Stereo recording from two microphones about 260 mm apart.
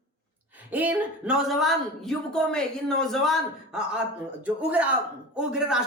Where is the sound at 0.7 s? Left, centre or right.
Centre.